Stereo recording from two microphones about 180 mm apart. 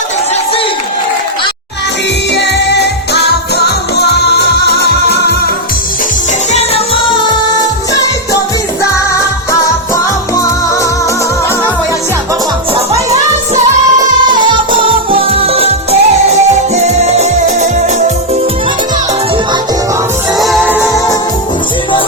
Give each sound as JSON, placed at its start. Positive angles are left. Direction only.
{"t": 2.3, "sound": "music", "side_deg": 70}
{"t": 6.5, "sound": "music", "side_deg": 35}
{"t": 14.3, "sound": "music", "side_deg": -25}
{"t": 20.4, "sound": "music", "side_deg": -5}
{"t": 20.7, "sound": "music", "side_deg": 15}